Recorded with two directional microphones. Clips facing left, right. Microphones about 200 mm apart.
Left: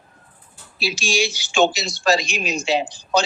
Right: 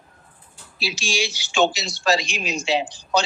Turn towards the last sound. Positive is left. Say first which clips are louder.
# left 2 dB
turn(degrees=45)  # may be behind; listen again after turning